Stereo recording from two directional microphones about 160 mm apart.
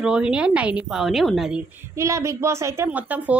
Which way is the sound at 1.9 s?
20° right (ahead or behind).